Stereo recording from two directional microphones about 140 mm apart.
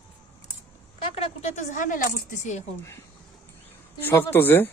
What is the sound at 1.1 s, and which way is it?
Speech, 45° left (ahead or behind).